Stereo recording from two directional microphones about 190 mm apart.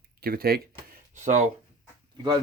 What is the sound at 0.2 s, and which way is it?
Speech, 50° right (ahead or behind).